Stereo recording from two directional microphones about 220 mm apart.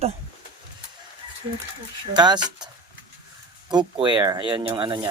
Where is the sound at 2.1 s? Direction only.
20° right (ahead or behind).